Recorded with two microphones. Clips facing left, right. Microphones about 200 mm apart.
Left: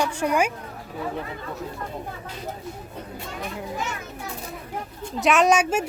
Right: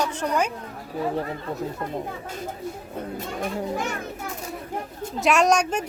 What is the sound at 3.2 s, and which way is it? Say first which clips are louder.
Speech: right 4 dB; 45° right (ahead or behind).